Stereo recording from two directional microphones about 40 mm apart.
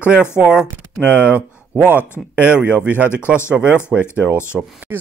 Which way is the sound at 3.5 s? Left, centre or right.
Right.